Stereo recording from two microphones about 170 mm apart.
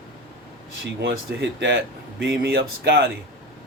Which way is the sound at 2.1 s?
70° right (ahead or behind).